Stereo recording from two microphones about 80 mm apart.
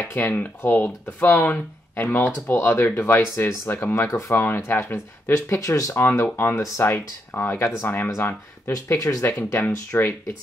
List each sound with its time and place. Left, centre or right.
0.2 s speech: left
8.9 s speech: left
9.4 s speech: left